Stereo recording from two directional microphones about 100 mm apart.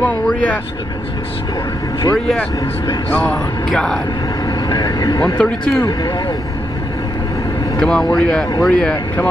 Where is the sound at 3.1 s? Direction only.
15° left (ahead or behind).